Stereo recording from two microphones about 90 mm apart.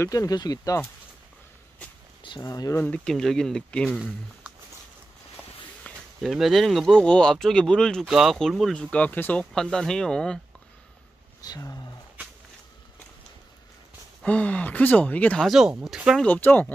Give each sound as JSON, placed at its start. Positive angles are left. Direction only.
{"t": 0.1, "sound": "speech", "side_deg": 45}
{"t": 2.4, "sound": "speech", "side_deg": 45}
{"t": 2.8, "sound": "speech", "side_deg": 10}
{"t": 5.9, "sound": "a sound", "side_deg": 15}
{"t": 6.2, "sound": "speech", "side_deg": 0}
{"t": 8.1, "sound": "speech", "side_deg": -5}
{"t": 8.7, "sound": "speech", "side_deg": 15}
{"t": 9.5, "sound": "speech", "side_deg": 5}
{"t": 11.4, "sound": "speech", "side_deg": 45}
{"t": 14.2, "sound": "speech", "side_deg": 15}
{"t": 15.4, "sound": "speech", "side_deg": -5}
{"t": 16.3, "sound": "speech", "side_deg": 20}